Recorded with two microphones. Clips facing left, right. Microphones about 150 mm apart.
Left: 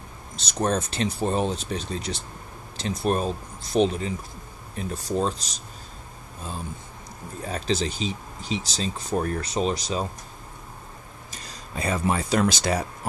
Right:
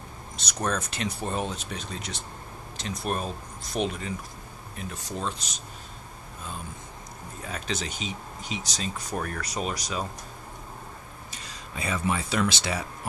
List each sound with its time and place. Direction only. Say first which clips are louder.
0.4 s speech: left 5 dB; 30° left (ahead or behind)
7.4 s speech: left 7 dB; 35° left (ahead or behind)
11.3 s speech: left 4 dB; 40° left (ahead or behind)